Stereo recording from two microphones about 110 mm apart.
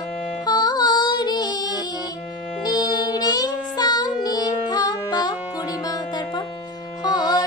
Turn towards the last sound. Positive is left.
turn(degrees=40)  # may be behind; listen again after turning